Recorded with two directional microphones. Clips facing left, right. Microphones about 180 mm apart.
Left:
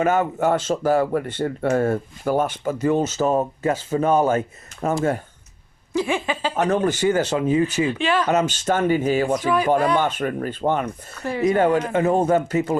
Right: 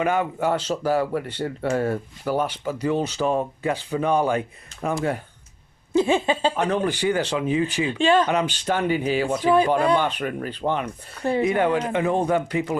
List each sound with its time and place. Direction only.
0.0 s speech: 45° left (ahead or behind)
5.9 s speech: 25° right (ahead or behind)
6.6 s speech: 45° left (ahead or behind)
7.9 s speech: 30° right (ahead or behind)
8.3 s speech: 45° left (ahead or behind)